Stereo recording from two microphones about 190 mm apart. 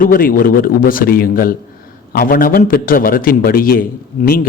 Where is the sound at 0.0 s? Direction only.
50° left (ahead or behind).